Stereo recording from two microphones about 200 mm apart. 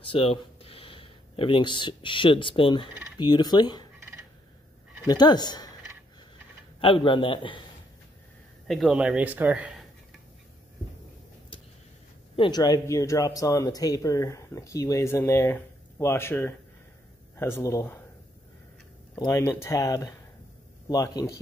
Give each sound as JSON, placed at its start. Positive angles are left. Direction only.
{"t": 0.0, "sound": "a man's voice", "side_deg": 25}
{"t": 5.0, "sound": "speech", "side_deg": 20}
{"t": 6.8, "sound": "a man's voice", "side_deg": 25}
{"t": 8.6, "sound": "speech", "side_deg": -5}
{"t": 12.4, "sound": "speech", "side_deg": 20}
{"t": 19.1, "sound": "speech", "side_deg": 15}